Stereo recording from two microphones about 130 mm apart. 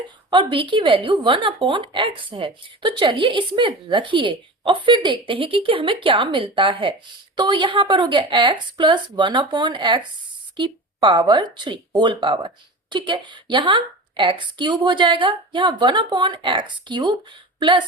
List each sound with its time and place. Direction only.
0.3 s speech: 40° right (ahead or behind)